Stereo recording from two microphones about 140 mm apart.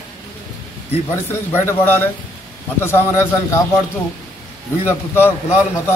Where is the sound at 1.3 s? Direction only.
15° left (ahead or behind).